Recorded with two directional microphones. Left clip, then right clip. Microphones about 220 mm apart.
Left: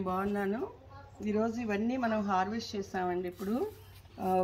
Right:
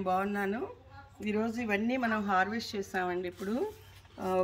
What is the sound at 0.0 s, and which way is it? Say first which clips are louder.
A woman's voice: right 2 dB; 10° right (ahead or behind).